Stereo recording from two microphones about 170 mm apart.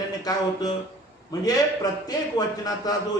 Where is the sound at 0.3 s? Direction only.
20° left (ahead or behind).